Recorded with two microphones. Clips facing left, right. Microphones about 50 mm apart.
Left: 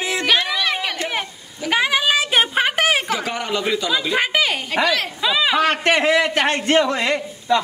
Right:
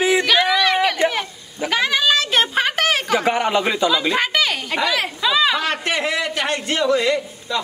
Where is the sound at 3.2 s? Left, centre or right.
Right.